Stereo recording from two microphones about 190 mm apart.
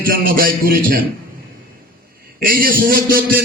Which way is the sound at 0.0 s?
50° right (ahead or behind).